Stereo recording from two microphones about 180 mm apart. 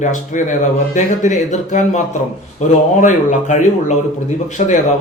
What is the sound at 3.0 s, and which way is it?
Speech, 45° left (ahead or behind).